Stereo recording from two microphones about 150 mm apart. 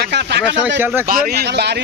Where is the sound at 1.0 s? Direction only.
85° right.